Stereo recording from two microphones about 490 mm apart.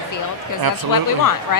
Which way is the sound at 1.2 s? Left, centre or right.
Left.